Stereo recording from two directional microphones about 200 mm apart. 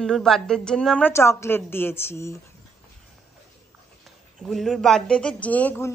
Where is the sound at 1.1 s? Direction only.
15° left (ahead or behind).